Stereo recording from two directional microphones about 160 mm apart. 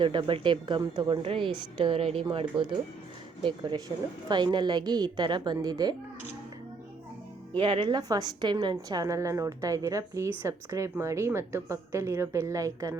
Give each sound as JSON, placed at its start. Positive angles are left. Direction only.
{"t": 0.0, "sound": "a woman's voice", "side_deg": -30}
{"t": 7.5, "sound": "a woman's voice", "side_deg": -30}